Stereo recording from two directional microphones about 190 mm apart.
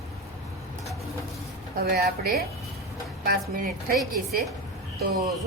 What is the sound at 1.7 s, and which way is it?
A woman's voice, 50° right (ahead or behind).